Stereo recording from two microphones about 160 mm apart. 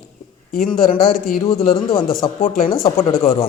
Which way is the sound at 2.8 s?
35° left (ahead or behind).